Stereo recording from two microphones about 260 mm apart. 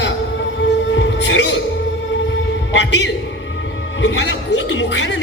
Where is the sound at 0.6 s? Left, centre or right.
Left.